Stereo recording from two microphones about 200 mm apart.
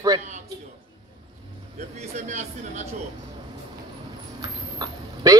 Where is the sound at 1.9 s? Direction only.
35° right (ahead or behind).